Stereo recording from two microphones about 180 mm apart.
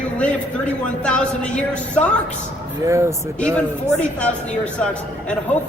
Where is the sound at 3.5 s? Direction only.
5° left (ahead or behind).